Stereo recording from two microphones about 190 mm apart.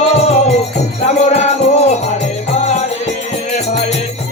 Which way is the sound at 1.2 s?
40° left (ahead or behind).